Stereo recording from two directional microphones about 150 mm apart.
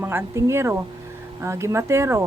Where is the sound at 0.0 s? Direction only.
15° right (ahead or behind).